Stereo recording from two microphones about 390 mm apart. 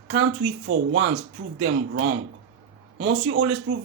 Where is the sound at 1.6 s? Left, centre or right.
Right.